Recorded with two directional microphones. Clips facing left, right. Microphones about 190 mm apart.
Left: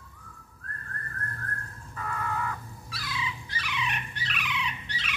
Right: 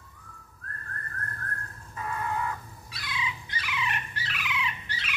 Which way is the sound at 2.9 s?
20° right (ahead or behind).